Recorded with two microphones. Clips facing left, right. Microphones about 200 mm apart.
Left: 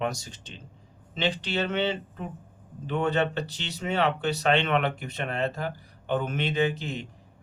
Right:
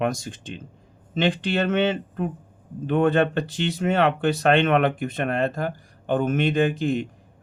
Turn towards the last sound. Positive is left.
turn(degrees=-50)  # may be behind; listen again after turning